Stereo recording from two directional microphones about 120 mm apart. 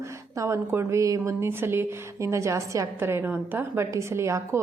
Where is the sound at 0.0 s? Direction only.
25° right (ahead or behind).